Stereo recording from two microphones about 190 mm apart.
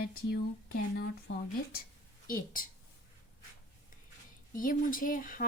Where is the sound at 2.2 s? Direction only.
45° left (ahead or behind).